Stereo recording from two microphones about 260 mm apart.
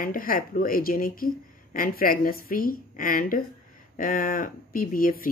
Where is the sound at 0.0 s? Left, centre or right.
Left.